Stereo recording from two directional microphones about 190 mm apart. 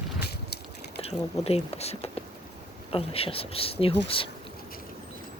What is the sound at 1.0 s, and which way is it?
Speech, 35° left (ahead or behind).